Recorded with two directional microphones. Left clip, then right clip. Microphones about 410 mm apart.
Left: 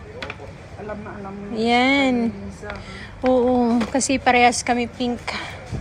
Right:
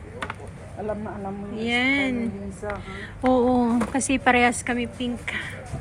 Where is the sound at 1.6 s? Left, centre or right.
Centre.